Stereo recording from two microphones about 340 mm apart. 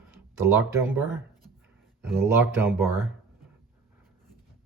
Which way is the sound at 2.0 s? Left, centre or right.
Centre.